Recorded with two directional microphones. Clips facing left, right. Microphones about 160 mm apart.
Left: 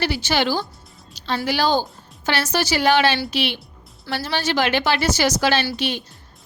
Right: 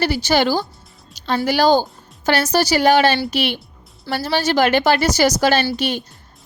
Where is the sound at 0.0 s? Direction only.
40° right (ahead or behind).